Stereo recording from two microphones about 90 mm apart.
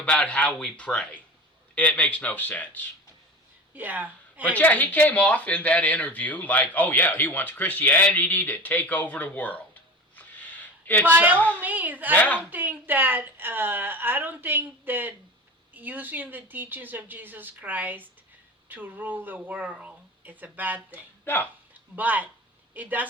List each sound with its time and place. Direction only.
0.0 s a man's voice: 10° left (ahead or behind)
3.8 s speech: 20° right (ahead or behind)
4.4 s speech: 15° left (ahead or behind)
10.2 s a sound: 20° left (ahead or behind)
11.0 s a woman's voice: 20° right (ahead or behind)
12.1 s speech: 20° left (ahead or behind)
12.5 s a woman's voice: 20° right (ahead or behind)
21.7 s a sound: 20° right (ahead or behind)
22.7 s a woman's voice: 20° right (ahead or behind)